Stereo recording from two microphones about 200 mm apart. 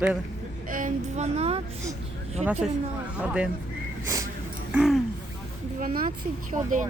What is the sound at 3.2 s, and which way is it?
Speech, 5° right (ahead or behind).